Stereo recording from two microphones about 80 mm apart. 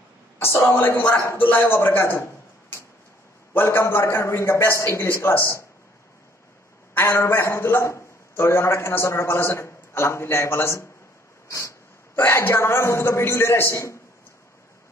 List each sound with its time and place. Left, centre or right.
0.4 s a woman's voice: left
3.5 s a man's voice: left
6.9 s a man's voice: left
11.4 s snort: left
12.2 s a man's voice: left